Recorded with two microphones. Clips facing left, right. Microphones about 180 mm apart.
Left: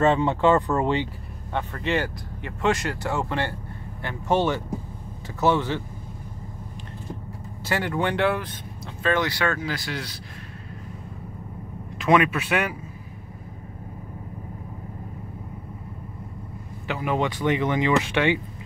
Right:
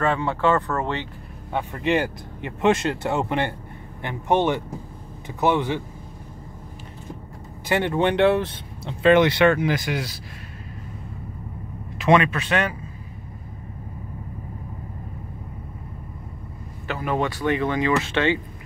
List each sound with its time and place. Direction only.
0.0 s speech: 20° left (ahead or behind)
1.5 s speech: 15° right (ahead or behind)
7.6 s speech: 20° right (ahead or behind)
12.0 s speech: 5° left (ahead or behind)
16.8 s speech: 15° left (ahead or behind)